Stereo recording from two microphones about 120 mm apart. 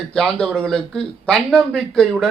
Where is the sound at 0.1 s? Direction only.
5° left (ahead or behind).